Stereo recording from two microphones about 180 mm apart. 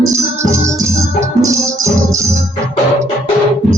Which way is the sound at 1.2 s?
15° right (ahead or behind).